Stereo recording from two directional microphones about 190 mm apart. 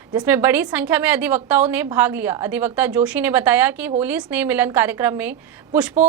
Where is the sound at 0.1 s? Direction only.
15° right (ahead or behind).